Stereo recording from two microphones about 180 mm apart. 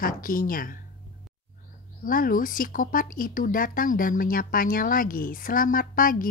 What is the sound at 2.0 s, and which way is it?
A woman's voice, 50° left (ahead or behind).